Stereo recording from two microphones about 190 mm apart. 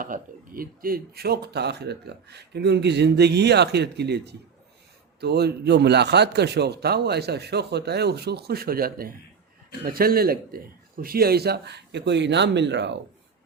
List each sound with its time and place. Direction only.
0.0 s speech: 45° right (ahead or behind); by 13.0 s 65° right (ahead or behind)